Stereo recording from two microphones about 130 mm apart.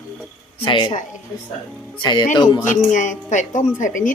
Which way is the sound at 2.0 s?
35° left (ahead or behind).